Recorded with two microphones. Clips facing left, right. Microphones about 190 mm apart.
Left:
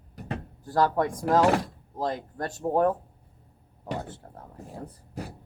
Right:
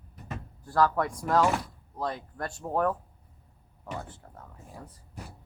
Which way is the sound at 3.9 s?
35° left (ahead or behind).